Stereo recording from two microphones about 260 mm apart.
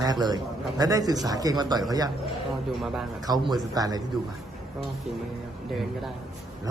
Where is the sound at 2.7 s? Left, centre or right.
Centre.